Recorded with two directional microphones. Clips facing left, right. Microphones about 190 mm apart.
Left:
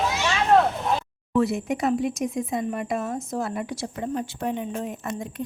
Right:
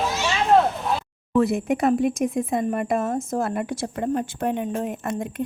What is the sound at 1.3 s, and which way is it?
A woman's voice, 55° right (ahead or behind).